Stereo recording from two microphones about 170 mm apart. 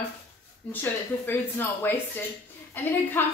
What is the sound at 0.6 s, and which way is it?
A woman's voice, 10° left (ahead or behind).